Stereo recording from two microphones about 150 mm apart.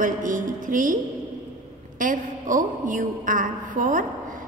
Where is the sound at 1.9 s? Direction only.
60° right (ahead or behind).